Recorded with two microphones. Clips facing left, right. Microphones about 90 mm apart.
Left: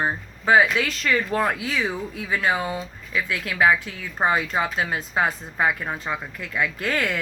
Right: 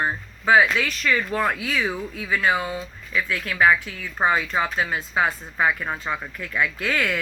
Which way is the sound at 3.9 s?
50° left (ahead or behind).